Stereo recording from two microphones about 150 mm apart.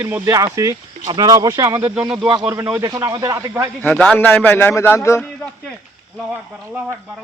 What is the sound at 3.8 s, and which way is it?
A man's voice, 10° left (ahead or behind).